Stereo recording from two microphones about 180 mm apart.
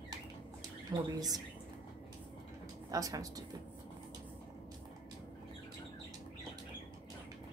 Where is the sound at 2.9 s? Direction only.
20° right (ahead or behind).